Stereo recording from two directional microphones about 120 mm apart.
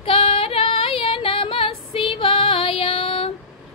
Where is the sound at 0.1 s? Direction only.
50° left (ahead or behind).